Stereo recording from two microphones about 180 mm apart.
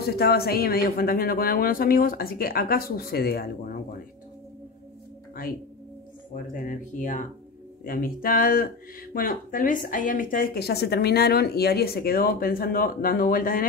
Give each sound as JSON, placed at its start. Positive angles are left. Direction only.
{"t": 0.0, "sound": "speech", "side_deg": 60}
{"t": 6.5, "sound": "a woman's voice", "side_deg": 45}